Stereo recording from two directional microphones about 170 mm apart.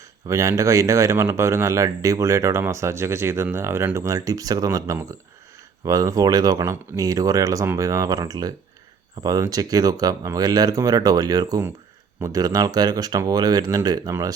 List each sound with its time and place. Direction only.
0.3 s speech: 20° right (ahead or behind)